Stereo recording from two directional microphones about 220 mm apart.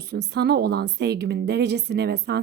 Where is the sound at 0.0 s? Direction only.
50° right (ahead or behind).